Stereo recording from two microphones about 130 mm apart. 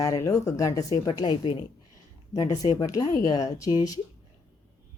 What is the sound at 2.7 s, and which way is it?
Speech, 30° left (ahead or behind).